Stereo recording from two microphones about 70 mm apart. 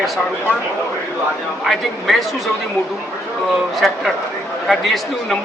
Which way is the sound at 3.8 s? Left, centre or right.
Centre.